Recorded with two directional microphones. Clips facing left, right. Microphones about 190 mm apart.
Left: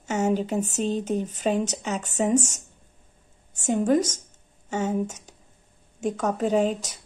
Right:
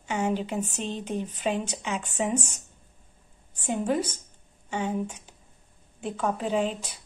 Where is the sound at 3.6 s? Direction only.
45° left (ahead or behind).